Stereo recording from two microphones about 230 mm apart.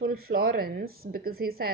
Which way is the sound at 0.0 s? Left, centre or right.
Right.